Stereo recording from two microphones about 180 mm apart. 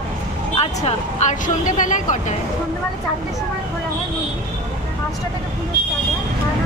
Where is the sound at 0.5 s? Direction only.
35° left (ahead or behind).